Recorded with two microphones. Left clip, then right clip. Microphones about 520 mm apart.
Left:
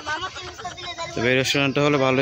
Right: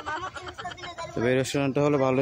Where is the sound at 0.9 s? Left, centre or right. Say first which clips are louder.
Left 4 dB; right.